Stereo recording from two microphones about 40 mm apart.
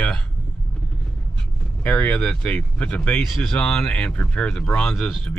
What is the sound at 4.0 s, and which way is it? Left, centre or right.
Speech, left.